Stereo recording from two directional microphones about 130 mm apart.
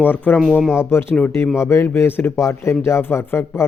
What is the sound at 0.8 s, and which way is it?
Speech, 20° left (ahead or behind).